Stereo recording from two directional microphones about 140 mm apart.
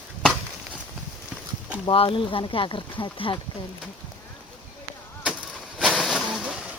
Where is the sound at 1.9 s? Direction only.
40° left (ahead or behind).